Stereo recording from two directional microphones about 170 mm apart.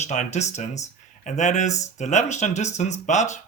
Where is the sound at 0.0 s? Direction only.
45° left (ahead or behind).